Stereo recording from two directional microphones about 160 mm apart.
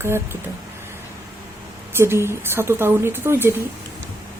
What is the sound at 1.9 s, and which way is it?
Speech, 15° right (ahead or behind).